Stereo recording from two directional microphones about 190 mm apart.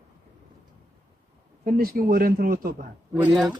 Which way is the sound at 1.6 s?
50° right (ahead or behind).